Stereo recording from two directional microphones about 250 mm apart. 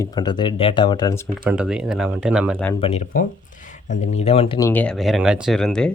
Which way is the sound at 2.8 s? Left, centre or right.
Left.